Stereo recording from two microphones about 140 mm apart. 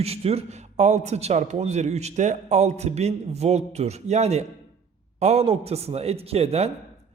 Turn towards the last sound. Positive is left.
turn(degrees=-50)  # may be behind; listen again after turning